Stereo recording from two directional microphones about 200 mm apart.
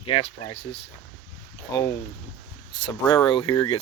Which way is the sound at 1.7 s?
15° left (ahead or behind).